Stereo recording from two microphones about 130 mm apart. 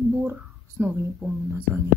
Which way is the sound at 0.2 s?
15° right (ahead or behind).